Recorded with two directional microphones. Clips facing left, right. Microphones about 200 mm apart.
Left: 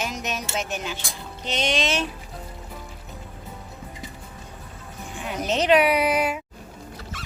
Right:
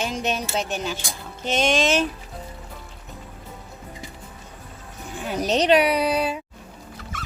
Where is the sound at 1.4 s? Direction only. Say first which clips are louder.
Right 4 dB; 45° right (ahead or behind).